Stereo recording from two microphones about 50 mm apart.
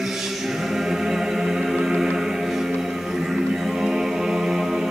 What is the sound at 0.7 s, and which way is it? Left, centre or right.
Music, centre.